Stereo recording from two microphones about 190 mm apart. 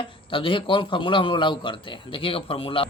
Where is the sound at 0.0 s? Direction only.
25° left (ahead or behind).